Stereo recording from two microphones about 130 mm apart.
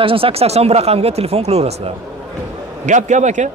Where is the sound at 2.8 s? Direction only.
70° right (ahead or behind).